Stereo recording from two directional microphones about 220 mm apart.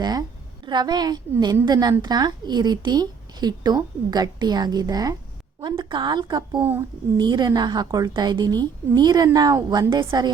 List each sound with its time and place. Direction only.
0.0 s a woman's voice: 15° right (ahead or behind)
6.6 s a woman's voice: 10° right (ahead or behind)